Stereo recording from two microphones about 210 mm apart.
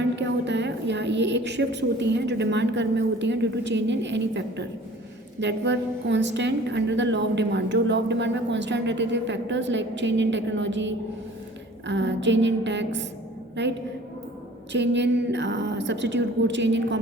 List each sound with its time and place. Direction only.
0.0 s a woman's voice: 55° right (ahead or behind)